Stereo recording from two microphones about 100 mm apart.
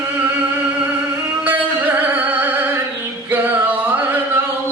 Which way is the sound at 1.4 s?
15° right (ahead or behind).